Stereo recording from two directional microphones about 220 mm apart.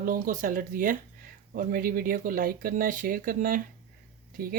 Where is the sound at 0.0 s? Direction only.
40° right (ahead or behind).